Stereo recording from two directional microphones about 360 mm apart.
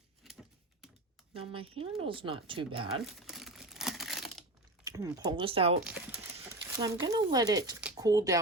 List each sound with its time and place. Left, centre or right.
0.2 s a sound: centre
1.3 s speech: centre
3.0 s crumpling: centre
4.9 s speech: centre